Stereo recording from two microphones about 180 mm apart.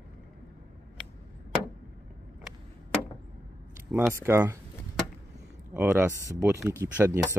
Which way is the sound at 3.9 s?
5° right (ahead or behind).